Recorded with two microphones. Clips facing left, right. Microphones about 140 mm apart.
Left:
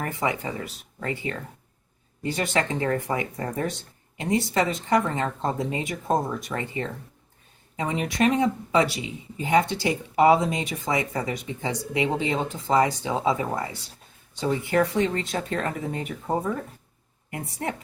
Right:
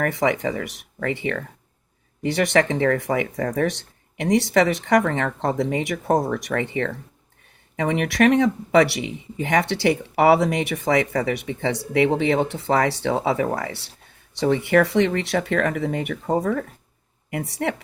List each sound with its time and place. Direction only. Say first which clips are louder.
0.0 s speech: right 6 dB; 80° right